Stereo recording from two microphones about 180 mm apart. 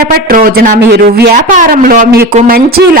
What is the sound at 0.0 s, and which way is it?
Speech, 55° right (ahead or behind).